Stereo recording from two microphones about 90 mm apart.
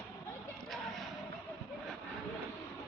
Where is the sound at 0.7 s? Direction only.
5° left (ahead or behind).